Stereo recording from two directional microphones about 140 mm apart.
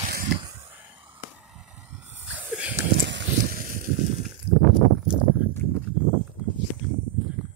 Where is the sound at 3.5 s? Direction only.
80° right.